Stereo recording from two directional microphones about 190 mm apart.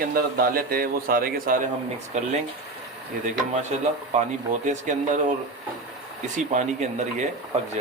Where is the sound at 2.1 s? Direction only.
35° right (ahead or behind).